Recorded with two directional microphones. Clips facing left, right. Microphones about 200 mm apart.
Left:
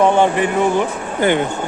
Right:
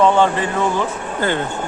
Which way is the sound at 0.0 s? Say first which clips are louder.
Left 1 dB; 15° left (ahead or behind).